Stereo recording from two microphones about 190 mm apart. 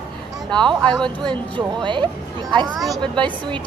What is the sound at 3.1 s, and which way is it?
Speech, 25° right (ahead or behind).